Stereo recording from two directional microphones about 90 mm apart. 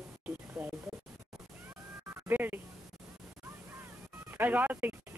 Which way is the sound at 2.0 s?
25° right (ahead or behind).